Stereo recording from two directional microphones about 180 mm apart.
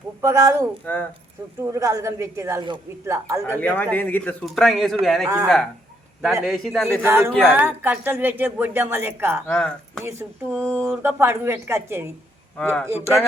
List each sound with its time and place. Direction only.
0.2 s a woman's voice: 15° right (ahead or behind)
0.9 s a man's voice: 10° left (ahead or behind)
1.6 s a woman's voice: 15° right (ahead or behind)
3.6 s a man's voice: 10° left (ahead or behind)
6.5 s speech: centre (ahead or behind)
7.0 s a woman's voice: 15° right (ahead or behind)
9.5 s speech: 5° left (ahead or behind)
10.0 s a woman's voice: 15° right (ahead or behind)
12.5 s a man's voice: 5° left (ahead or behind)